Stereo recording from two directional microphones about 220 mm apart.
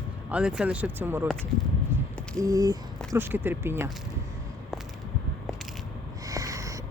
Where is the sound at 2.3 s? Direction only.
15° right (ahead or behind).